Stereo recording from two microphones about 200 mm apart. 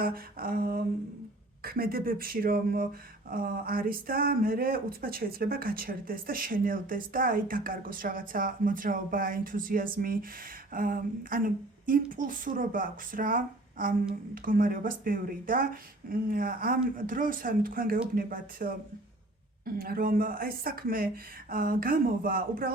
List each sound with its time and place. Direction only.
0.0 s speech: 45° right (ahead or behind)
19.8 s speech: 45° right (ahead or behind)